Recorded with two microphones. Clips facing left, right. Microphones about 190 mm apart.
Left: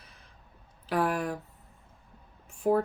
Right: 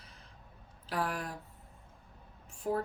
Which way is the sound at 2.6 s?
60° left (ahead or behind).